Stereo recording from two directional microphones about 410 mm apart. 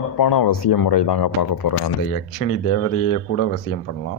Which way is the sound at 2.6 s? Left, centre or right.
Left.